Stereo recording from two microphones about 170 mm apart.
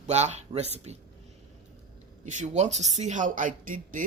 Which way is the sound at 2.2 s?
45° right (ahead or behind).